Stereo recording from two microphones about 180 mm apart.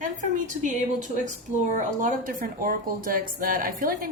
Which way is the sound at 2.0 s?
50° right (ahead or behind).